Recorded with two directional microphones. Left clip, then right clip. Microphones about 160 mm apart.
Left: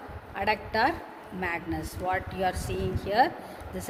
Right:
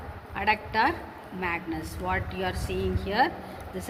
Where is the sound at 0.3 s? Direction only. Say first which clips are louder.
Right 2 dB; 75° left (ahead or behind).